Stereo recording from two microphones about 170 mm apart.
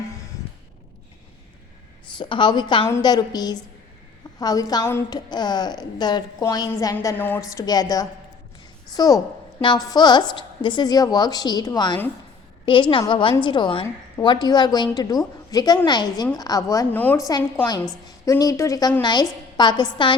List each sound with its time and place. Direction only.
2.1 s a woman's voice: 25° left (ahead or behind); by 17.2 s 10° left (ahead or behind)
18.3 s a woman's voice: 20° left (ahead or behind)